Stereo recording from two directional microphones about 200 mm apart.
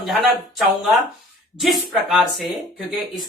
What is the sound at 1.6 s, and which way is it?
Speech, centre (ahead or behind).